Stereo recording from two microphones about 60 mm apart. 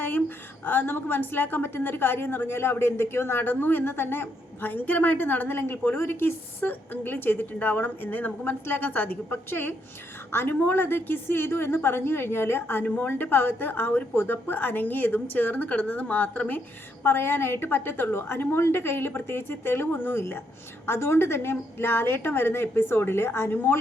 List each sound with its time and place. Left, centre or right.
0.6 s a woman's voice: left
17.0 s a woman's voice: left